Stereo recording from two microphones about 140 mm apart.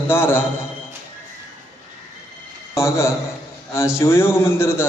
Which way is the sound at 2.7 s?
20° left (ahead or behind).